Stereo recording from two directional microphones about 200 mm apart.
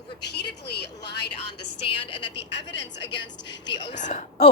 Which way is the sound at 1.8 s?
25° left (ahead or behind).